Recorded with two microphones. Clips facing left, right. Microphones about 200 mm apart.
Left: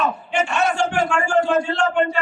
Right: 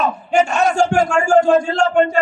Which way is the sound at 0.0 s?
40° right (ahead or behind).